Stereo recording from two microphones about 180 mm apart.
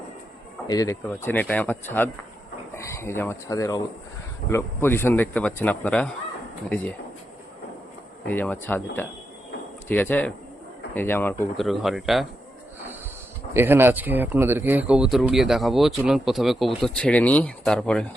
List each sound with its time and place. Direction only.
0.7 s speech: 20° left (ahead or behind)
8.3 s speech: 10° left (ahead or behind)
9.9 s speech: 10° left (ahead or behind)
11.5 s speech: centre (ahead or behind)
13.5 s speech: 15° right (ahead or behind); by 18.1 s 5° left (ahead or behind)